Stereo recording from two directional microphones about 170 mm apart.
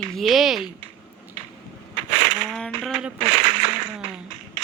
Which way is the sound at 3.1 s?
45° right (ahead or behind).